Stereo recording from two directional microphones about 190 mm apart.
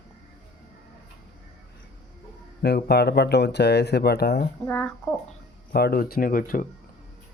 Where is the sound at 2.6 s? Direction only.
60° left (ahead or behind).